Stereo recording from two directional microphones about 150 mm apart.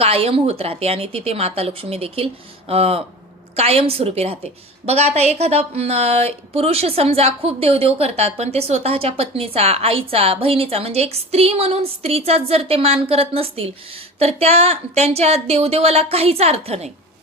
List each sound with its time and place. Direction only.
0.0 s a woman's voice: 40° right (ahead or behind)